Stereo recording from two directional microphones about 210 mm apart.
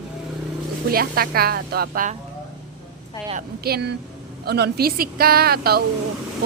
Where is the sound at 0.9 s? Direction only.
45° right (ahead or behind).